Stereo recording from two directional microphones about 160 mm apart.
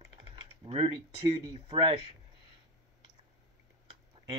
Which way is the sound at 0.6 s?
35° right (ahead or behind).